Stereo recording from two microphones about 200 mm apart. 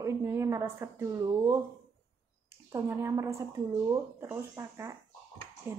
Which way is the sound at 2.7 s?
15° right (ahead or behind).